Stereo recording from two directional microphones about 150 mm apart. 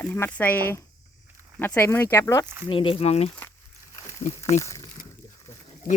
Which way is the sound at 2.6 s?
35° left (ahead or behind).